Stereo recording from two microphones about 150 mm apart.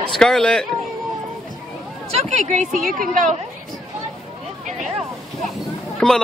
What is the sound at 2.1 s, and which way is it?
A woman's voice, 45° right (ahead or behind).